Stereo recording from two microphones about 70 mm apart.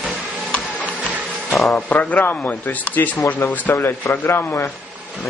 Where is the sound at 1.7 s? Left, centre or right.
Left.